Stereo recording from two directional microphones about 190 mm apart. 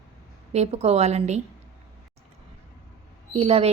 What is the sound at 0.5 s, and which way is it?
Speech, 35° right (ahead or behind).